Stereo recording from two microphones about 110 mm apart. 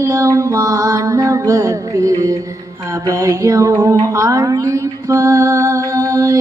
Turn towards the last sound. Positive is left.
turn(degrees=-30)  # may be behind; listen again after turning